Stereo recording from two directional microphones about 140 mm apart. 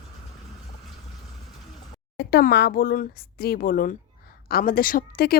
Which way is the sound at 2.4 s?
90° left.